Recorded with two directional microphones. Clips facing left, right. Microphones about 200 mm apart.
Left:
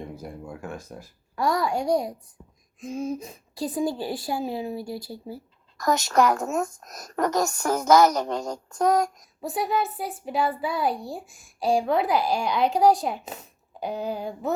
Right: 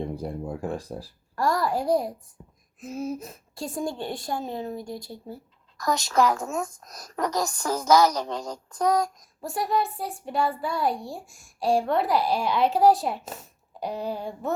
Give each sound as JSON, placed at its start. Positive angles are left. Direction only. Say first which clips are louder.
{"t": 0.0, "sound": "speech", "louder": "right 6 dB", "side_deg": -30}
{"t": 1.4, "sound": "a child's voice", "louder": "even", "side_deg": 0}
{"t": 6.1, "sound": "speech", "louder": "left 1 dB", "side_deg": 55}
{"t": 7.6, "sound": "child singing", "louder": "left 2 dB", "side_deg": 55}
{"t": 9.4, "sound": "a child's voice", "louder": "even", "side_deg": 0}